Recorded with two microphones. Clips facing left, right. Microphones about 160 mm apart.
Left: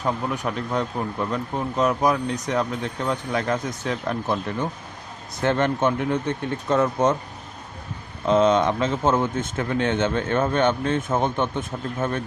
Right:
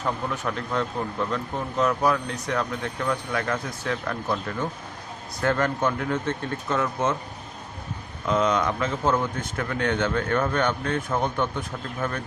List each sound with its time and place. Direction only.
0.0 s speech: 15° left (ahead or behind)
5.4 s speech: 20° left (ahead or behind)
6.7 s speech: 35° left (ahead or behind)
8.3 s speech: 25° left (ahead or behind)